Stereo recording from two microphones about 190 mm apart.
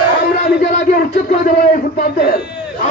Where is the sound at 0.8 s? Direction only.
45° left (ahead or behind).